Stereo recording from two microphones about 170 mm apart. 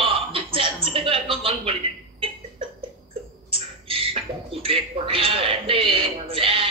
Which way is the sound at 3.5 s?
35° right (ahead or behind).